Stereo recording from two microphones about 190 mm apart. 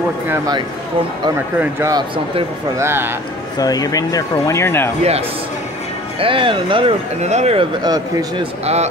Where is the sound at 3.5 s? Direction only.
20° left (ahead or behind).